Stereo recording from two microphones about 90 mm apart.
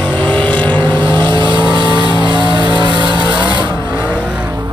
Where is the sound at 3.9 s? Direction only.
15° right (ahead or behind).